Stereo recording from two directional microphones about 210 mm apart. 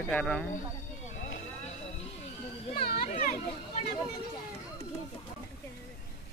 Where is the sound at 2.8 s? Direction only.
45° left (ahead or behind).